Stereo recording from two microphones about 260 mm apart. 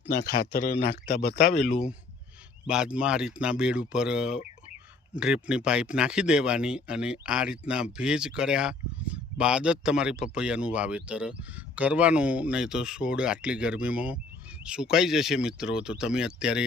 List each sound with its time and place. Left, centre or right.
0.1 s speech: left
1.5 s speech: centre